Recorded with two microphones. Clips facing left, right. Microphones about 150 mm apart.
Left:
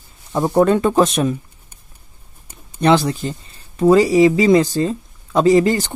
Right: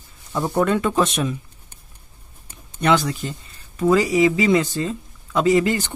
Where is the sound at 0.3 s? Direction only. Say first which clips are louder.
Left 5 dB; 30° left (ahead or behind).